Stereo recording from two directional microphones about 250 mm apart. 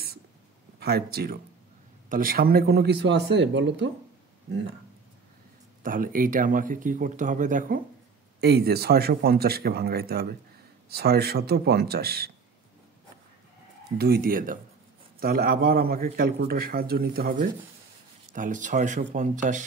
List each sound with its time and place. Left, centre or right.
0.7 s a man's voice: right
5.8 s a man's voice: right
13.9 s a man's voice: right